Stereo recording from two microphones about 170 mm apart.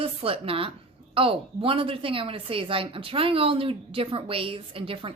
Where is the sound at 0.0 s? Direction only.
35° right (ahead or behind).